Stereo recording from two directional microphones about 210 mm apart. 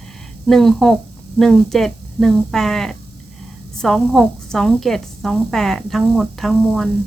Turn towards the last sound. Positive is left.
turn(degrees=0)  # may be behind; listen again after turning